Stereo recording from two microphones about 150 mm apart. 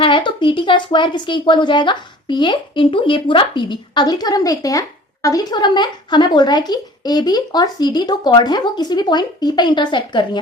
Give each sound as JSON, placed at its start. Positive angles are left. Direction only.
{"t": 0.0, "sound": "a woman's voice", "side_deg": 35}